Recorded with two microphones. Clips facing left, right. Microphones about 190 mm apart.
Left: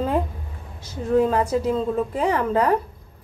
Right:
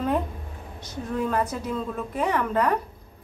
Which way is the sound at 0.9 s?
25° left (ahead or behind).